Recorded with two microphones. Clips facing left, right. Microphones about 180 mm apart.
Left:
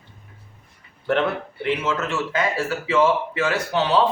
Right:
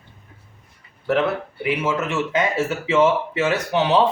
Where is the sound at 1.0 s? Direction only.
5° right (ahead or behind); by 4.0 s 20° right (ahead or behind).